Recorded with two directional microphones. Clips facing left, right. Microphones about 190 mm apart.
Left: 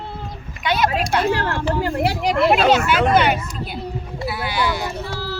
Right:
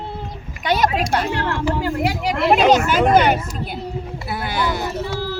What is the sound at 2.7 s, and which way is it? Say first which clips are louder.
Speech: right 2 dB; 40° right (ahead or behind).